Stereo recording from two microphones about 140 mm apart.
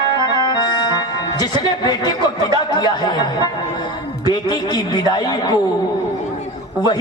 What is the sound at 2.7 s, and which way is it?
Speech, 30° left (ahead or behind).